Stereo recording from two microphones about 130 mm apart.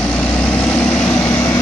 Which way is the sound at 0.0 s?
5° left (ahead or behind).